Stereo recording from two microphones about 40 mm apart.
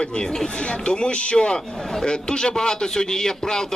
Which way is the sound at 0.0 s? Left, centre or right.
Centre.